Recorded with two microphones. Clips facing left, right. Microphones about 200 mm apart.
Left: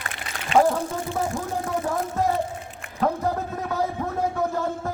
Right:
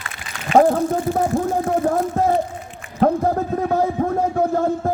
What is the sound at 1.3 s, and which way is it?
Speech, 40° right (ahead or behind).